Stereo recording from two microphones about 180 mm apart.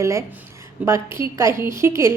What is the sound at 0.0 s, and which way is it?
A woman's voice, 15° right (ahead or behind).